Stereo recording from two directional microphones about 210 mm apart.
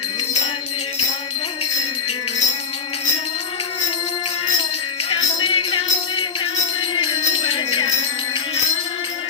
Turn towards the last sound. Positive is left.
turn(degrees=25)  # may be behind; listen again after turning